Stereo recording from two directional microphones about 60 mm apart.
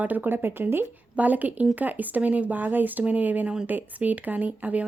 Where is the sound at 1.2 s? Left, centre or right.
Right.